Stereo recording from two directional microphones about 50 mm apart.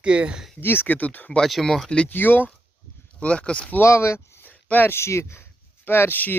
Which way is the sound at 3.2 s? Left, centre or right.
Left.